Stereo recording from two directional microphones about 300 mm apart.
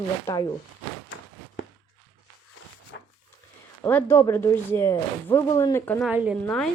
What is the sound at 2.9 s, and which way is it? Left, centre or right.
Dog, left.